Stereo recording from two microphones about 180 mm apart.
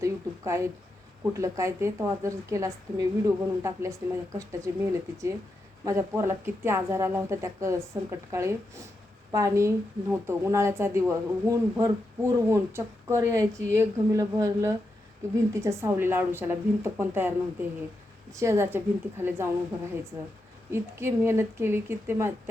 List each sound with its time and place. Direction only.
0.0 s a woman's voice: 15° right (ahead or behind)
20.7 s a woman's voice: 15° right (ahead or behind)